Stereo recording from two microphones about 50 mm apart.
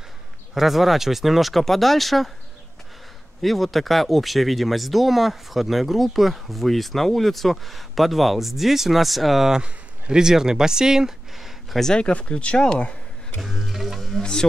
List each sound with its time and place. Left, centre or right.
0.6 s speech: centre
3.4 s speech: centre
9.6 s speech: centre
11.8 s speech: centre
12.1 s speech: left
13.4 s speech: centre